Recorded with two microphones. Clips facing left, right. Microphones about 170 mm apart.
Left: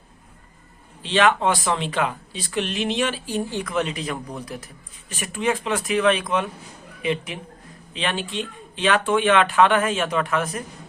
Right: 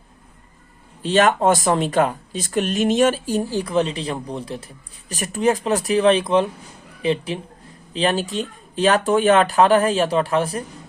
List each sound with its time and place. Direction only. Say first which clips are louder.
1.0 s speech: right 3 dB; 45° right (ahead or behind)